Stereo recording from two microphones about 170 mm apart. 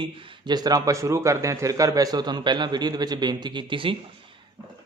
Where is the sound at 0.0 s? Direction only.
30° right (ahead or behind).